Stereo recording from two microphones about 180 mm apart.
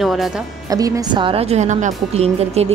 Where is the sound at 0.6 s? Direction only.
20° right (ahead or behind).